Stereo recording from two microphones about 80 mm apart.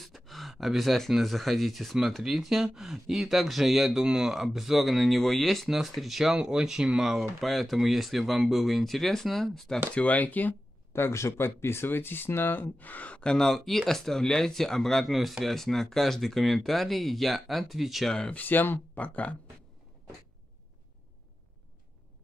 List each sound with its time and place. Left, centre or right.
0.0 s speech: centre
9.9 s speech: centre
10.9 s speech: left; by 18.1 s centre
18.1 s speech: centre
18.4 s speech: left